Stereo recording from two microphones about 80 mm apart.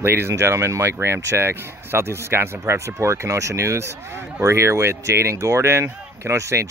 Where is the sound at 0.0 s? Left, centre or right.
Right.